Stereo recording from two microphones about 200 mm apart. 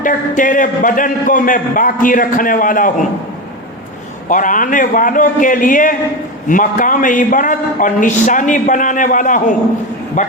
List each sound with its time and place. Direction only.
0.0 s a man's voice: 40° left (ahead or behind)
4.3 s a man's voice: 40° left (ahead or behind)